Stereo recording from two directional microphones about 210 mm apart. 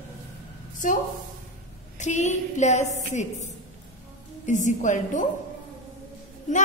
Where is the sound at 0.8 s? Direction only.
35° left (ahead or behind).